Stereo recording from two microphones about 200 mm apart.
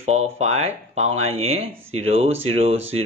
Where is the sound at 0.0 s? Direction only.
35° right (ahead or behind).